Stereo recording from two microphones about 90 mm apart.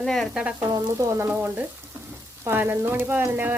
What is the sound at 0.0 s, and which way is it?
Frying, 5° left (ahead or behind).